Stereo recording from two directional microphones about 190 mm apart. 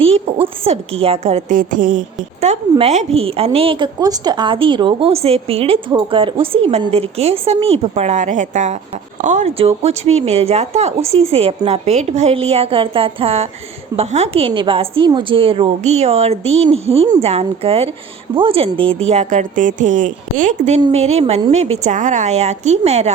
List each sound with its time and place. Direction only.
0.0 s a woman's voice: 30° right (ahead or behind)
2.4 s a woman's voice: 35° right (ahead or behind)